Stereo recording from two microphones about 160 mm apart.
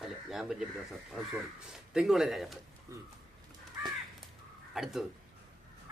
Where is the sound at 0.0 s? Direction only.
Centre (ahead or behind).